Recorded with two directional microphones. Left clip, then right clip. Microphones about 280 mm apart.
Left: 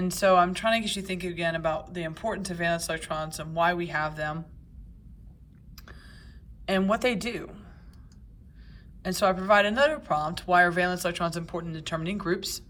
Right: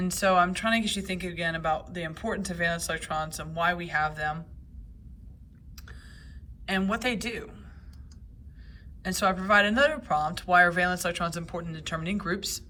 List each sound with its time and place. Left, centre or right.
0.0 s speech: centre
5.7 s a sound: centre
6.7 s a man's voice: centre
9.0 s speech: centre